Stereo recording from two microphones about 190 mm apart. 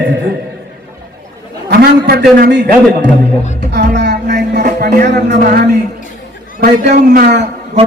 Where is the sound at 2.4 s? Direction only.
60° right (ahead or behind).